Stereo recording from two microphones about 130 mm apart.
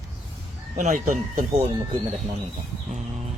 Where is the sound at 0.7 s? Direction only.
70° right (ahead or behind).